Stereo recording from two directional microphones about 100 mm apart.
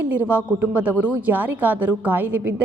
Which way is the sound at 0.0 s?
15° right (ahead or behind).